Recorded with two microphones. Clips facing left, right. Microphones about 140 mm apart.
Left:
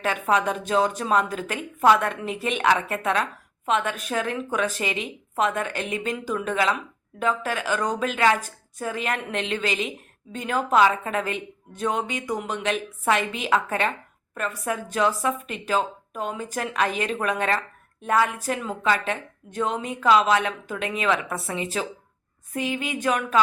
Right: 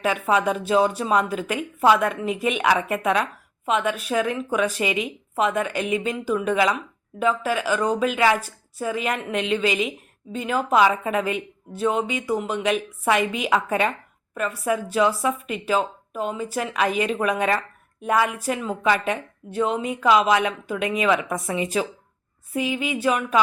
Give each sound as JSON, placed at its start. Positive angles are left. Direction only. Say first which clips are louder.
{"t": 0.0, "sound": "a woman's voice", "louder": "right 2 dB", "side_deg": -10}